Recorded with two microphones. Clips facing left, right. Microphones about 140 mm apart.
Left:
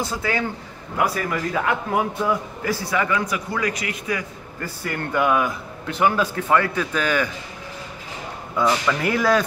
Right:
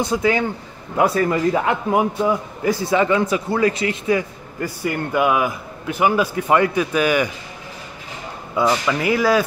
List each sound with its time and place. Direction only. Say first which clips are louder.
0.0 s a man's voice: right 6 dB; 20° right (ahead or behind)
4.8 s a man's voice: right 2 dB; 10° right (ahead or behind)
8.8 s speech: right 2 dB; 5° right (ahead or behind)